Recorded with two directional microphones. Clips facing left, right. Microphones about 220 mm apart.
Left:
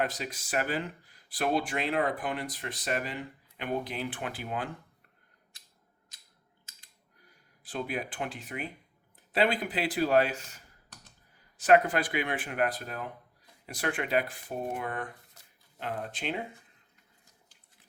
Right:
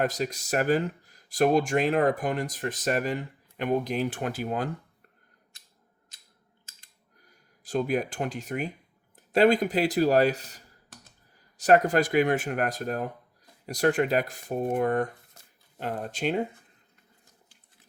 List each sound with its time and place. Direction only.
0.0 s speech: 40° right (ahead or behind)
7.3 s speech: 45° right (ahead or behind)
15.4 s a sound: 45° right (ahead or behind)
15.8 s speech: 45° right (ahead or behind)